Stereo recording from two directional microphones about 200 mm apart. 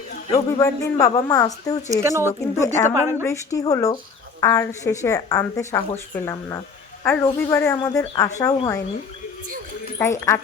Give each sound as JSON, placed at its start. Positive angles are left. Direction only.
{"t": 0.6, "sound": "a woman's voice", "side_deg": 15}
{"t": 1.9, "sound": "speech", "side_deg": -15}
{"t": 2.2, "sound": "a woman's voice", "side_deg": 15}
{"t": 2.9, "sound": "speech", "side_deg": -15}
{"t": 3.2, "sound": "a woman's voice", "side_deg": 15}
{"t": 10.0, "sound": "a woman's voice", "side_deg": 15}